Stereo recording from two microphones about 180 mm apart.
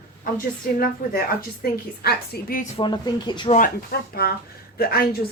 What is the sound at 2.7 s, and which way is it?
Speech, 25° left (ahead or behind).